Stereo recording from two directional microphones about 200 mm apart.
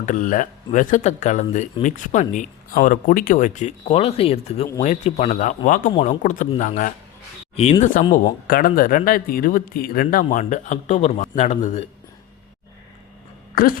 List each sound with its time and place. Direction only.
0.0 s speech: 40° left (ahead or behind)
13.6 s speech: 45° left (ahead or behind)